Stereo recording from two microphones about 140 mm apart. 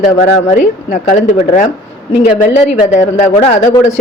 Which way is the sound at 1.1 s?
60° left (ahead or behind).